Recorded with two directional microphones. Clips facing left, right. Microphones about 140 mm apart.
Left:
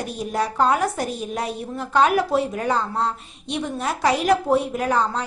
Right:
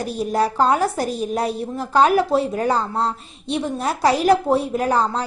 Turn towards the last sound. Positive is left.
turn(degrees=-35)  # may be behind; listen again after turning